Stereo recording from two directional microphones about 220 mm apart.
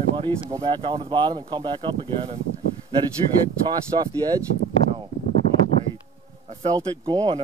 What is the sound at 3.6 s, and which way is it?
Speech, 20° right (ahead or behind).